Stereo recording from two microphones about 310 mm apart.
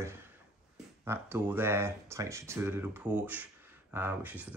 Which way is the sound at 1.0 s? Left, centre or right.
Centre.